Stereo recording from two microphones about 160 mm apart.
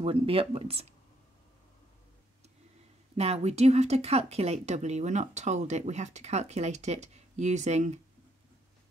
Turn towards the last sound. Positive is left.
turn(degrees=-45)  # may be behind; listen again after turning